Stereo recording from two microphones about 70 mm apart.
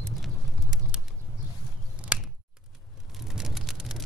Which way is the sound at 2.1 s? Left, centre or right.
Centre.